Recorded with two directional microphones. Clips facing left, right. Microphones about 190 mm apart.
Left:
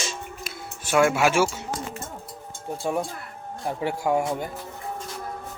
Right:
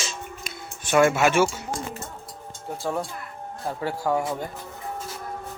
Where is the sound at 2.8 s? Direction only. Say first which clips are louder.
Left 2 dB; 15° left (ahead or behind).